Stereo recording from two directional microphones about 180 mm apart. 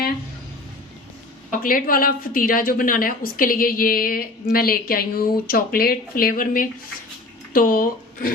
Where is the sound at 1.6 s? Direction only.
50° left (ahead or behind).